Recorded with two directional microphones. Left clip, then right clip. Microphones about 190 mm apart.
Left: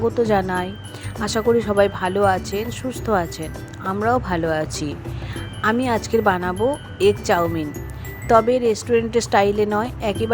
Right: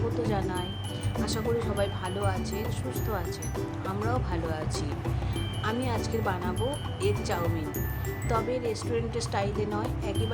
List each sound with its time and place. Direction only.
0.2 s speech: 40° left (ahead or behind)